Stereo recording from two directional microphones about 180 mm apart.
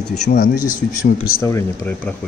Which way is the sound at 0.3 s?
50° left (ahead or behind).